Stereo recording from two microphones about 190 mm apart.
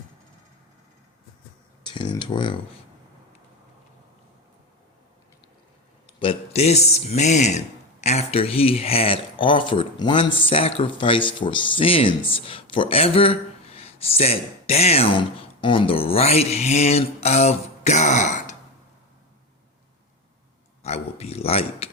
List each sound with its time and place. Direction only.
1.8 s speech: 25° left (ahead or behind)
6.1 s speech: 30° left (ahead or behind)
20.8 s speech: 35° left (ahead or behind)